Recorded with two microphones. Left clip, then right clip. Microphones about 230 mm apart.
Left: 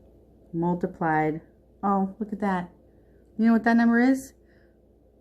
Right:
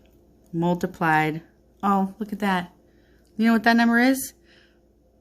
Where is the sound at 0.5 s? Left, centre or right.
Right.